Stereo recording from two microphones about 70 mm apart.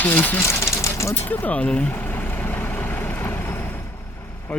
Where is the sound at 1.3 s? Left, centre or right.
Left.